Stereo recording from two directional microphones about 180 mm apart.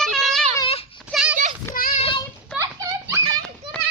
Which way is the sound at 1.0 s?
5° right (ahead or behind).